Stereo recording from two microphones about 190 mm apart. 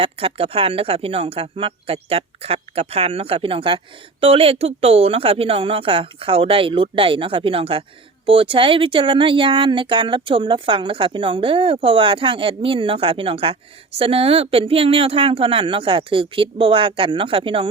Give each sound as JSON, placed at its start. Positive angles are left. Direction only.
{"t": 0.0, "sound": "speech", "side_deg": -30}